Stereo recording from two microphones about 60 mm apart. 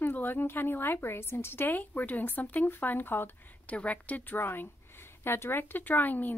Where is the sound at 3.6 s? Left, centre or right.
Left.